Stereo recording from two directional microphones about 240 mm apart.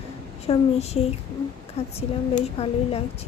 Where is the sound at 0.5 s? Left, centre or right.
Left.